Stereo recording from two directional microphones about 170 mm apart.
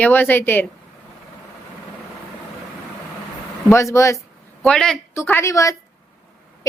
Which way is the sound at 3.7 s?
15° left (ahead or behind).